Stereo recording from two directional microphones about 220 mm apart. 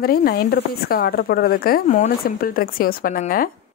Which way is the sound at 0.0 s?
45° left (ahead or behind).